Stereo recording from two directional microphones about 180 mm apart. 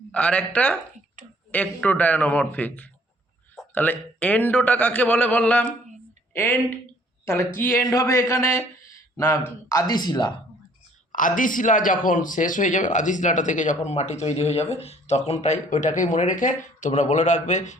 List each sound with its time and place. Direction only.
0.1 s a man's voice: 5° left (ahead or behind); by 10.3 s 25° left (ahead or behind)
11.1 s speech: 45° left (ahead or behind)